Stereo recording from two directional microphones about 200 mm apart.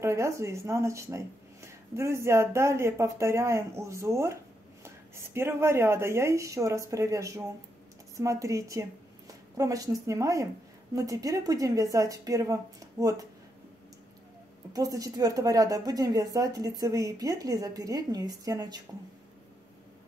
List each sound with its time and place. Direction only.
0.0 s speech: 15° right (ahead or behind)
14.7 s speech: 15° right (ahead or behind)